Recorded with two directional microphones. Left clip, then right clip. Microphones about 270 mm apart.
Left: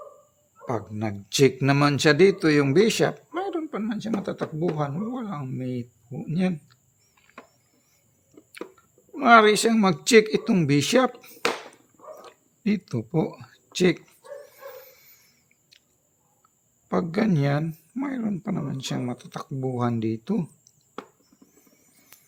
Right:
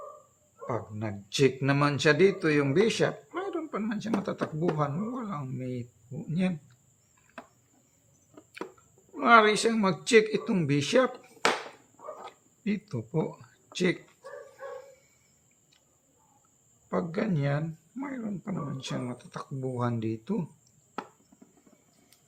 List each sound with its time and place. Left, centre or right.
0.6 s a man's voice: left
9.1 s a man's voice: left
12.6 s a man's voice: left
16.9 s speech: left